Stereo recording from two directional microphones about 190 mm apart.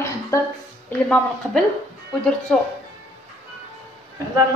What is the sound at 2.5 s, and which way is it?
Speech, 5° left (ahead or behind).